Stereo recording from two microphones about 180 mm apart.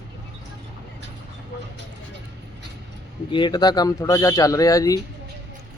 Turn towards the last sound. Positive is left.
turn(degrees=20)  # may be behind; listen again after turning